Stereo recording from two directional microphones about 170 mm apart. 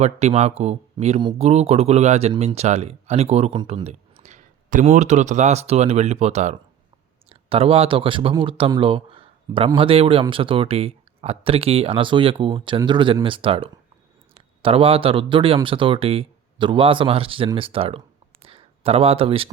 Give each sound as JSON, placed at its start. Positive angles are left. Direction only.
{"t": 0.0, "sound": "speech", "side_deg": -40}
{"t": 3.8, "sound": "speech", "side_deg": -45}